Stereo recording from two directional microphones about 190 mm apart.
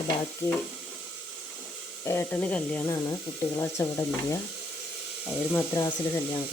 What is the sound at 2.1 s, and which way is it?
Speech, 10° left (ahead or behind).